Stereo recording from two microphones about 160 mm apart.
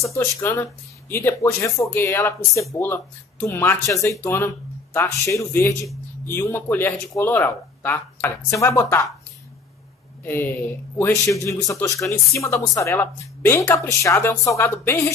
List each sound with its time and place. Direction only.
0.4 s speech: 20° left (ahead or behind)
10.2 s speech: 15° left (ahead or behind)